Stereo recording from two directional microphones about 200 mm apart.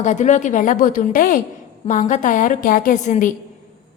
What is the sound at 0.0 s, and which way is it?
A woman's voice, 40° left (ahead or behind).